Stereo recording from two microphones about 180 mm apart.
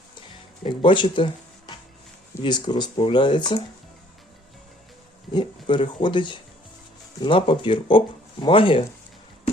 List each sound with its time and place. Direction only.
0.6 s speech: 30° left (ahead or behind)
5.3 s speech: 25° left (ahead or behind)